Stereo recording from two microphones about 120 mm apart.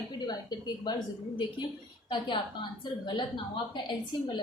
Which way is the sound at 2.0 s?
40° left (ahead or behind).